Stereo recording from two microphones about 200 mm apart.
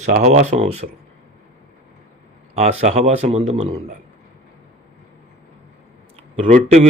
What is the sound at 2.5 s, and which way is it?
Speech, 35° right (ahead or behind).